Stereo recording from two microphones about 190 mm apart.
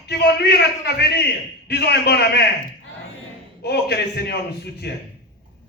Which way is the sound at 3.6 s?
60° left (ahead or behind).